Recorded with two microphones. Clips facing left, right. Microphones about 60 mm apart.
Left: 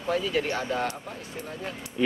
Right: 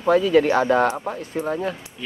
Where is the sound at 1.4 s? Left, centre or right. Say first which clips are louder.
Right 12 dB; right.